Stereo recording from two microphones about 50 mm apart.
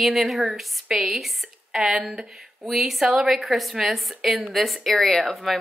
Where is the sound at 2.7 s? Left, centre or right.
Centre.